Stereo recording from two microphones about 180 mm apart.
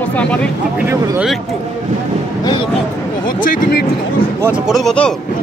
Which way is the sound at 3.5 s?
55° left (ahead or behind).